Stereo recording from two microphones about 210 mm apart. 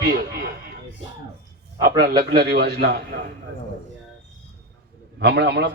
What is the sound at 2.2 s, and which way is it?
Speech, 50° right (ahead or behind).